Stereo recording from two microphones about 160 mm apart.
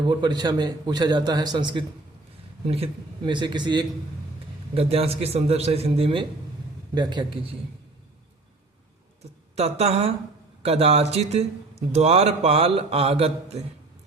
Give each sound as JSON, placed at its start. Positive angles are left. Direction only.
{"t": 0.0, "sound": "a man's voice", "side_deg": -30}
{"t": 4.7, "sound": "a man's voice", "side_deg": -40}
{"t": 9.6, "sound": "speech", "side_deg": -40}